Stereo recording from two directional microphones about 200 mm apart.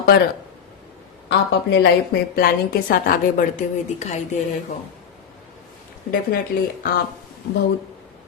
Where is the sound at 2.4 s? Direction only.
45° left (ahead or behind).